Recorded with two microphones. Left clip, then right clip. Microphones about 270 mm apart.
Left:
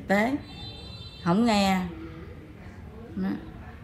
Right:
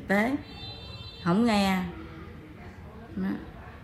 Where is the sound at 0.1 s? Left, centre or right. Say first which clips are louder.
Left 2 dB; centre.